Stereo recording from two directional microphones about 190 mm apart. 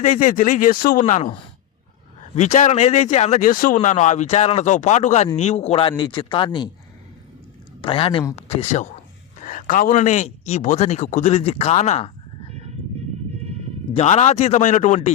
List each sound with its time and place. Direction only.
0.0 s speech: 40° left (ahead or behind)
2.3 s speech: 40° left (ahead or behind)
7.8 s a man's voice: 30° left (ahead or behind)
12.5 s horse: 35° right (ahead or behind)
13.9 s speech: 35° left (ahead or behind)